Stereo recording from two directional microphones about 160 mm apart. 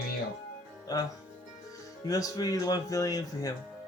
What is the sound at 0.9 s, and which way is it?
Speech, 20° left (ahead or behind).